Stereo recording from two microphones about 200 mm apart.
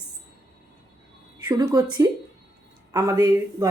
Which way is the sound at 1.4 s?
20° right (ahead or behind).